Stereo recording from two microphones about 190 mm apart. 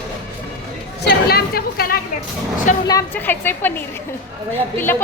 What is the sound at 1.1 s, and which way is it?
Chatter, 55° left (ahead or behind).